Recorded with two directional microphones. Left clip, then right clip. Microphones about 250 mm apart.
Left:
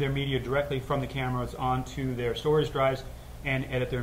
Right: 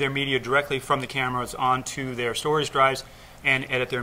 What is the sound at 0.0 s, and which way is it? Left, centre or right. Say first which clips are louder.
Speech: right 6 dB; right.